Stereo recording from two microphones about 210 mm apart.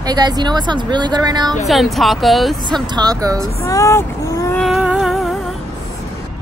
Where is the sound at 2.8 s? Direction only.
20° right (ahead or behind).